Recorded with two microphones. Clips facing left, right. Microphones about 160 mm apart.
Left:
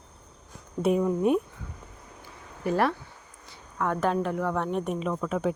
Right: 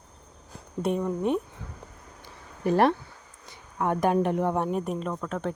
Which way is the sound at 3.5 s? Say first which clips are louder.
Right 2 dB; 15° right (ahead or behind).